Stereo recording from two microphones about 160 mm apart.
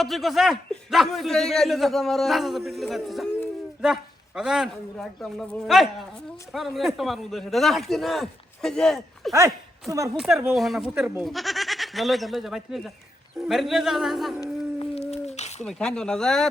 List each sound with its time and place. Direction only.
0.0 s a man's voice: centre (ahead or behind)
14.8 s a sound: 40° left (ahead or behind)
15.6 s a man's voice: 5° left (ahead or behind)